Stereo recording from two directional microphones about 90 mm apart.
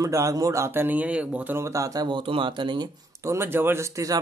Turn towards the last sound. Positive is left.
turn(degrees=-35)  # may be behind; listen again after turning